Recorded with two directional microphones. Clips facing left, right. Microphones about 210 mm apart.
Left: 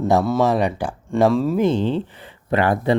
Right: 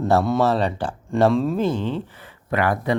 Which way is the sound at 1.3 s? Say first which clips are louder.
Left 2 dB; centre (ahead or behind).